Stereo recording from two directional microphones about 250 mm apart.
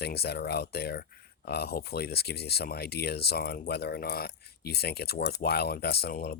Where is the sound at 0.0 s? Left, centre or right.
Left.